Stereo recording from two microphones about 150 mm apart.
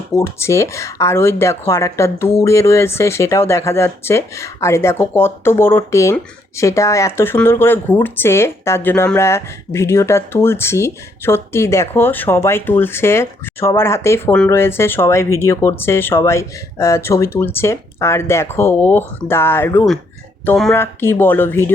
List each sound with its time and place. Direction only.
0.1 s speech: 15° left (ahead or behind)